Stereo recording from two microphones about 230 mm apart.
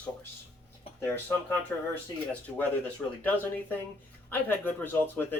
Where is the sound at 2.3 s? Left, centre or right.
Centre.